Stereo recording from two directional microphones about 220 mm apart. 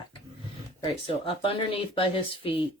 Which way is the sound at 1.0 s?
25° left (ahead or behind).